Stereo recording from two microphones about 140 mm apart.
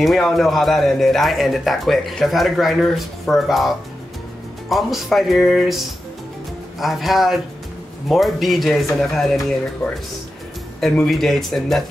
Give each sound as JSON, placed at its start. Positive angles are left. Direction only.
{"t": 0.0, "sound": "a man's voice", "side_deg": 0}
{"t": 10.8, "sound": "a man's voice", "side_deg": 0}